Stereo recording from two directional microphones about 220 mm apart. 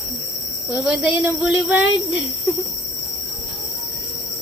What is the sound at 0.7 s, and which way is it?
A woman's voice, 10° right (ahead or behind).